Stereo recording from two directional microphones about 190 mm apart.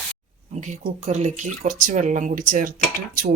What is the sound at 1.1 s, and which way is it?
Speech, 40° right (ahead or behind).